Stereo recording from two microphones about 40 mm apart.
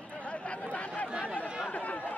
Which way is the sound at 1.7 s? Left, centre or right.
Left.